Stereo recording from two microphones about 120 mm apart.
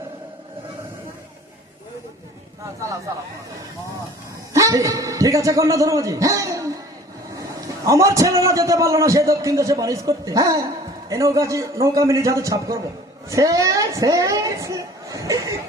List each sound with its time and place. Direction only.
4.5 s a man's voice: 25° right (ahead or behind)
7.9 s a man's voice: 25° right (ahead or behind)